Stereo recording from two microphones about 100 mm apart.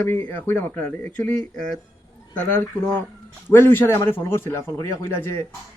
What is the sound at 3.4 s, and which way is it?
Speech, 20° left (ahead or behind).